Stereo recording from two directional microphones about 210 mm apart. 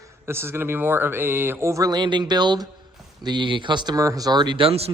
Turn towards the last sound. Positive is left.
turn(degrees=-30)  # may be behind; listen again after turning